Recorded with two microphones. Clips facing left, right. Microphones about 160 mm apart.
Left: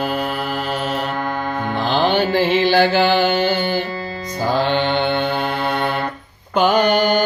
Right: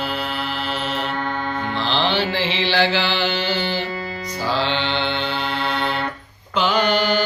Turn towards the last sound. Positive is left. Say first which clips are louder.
# left 4 dB
turn(degrees=45)  # may be behind; listen again after turning